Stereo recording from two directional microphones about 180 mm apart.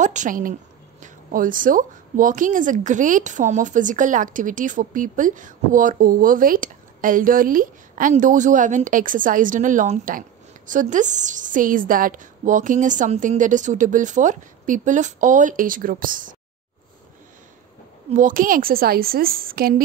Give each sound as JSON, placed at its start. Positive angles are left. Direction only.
{"t": 0.0, "sound": "a woman's voice", "side_deg": -45}
{"t": 18.1, "sound": "a woman's voice", "side_deg": -50}